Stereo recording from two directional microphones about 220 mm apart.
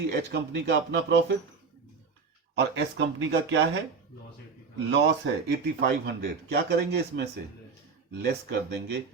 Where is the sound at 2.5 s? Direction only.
50° right (ahead or behind).